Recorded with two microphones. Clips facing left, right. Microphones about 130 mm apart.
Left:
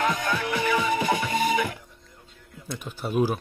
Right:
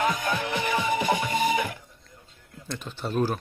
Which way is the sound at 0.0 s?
20° right (ahead or behind).